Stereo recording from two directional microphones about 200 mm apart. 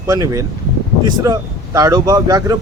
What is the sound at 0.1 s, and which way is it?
Speech, 15° right (ahead or behind).